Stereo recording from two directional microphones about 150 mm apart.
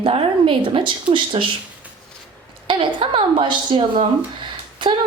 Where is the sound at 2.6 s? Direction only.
35° right (ahead or behind).